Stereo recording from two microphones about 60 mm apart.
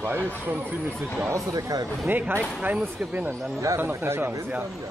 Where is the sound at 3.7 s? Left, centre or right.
Right.